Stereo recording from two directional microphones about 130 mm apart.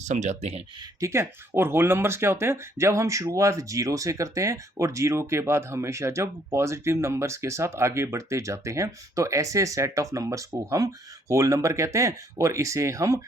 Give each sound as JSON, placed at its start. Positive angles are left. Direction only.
{"t": 0.0, "sound": "speech", "side_deg": -65}
{"t": 0.8, "sound": "speech", "side_deg": -25}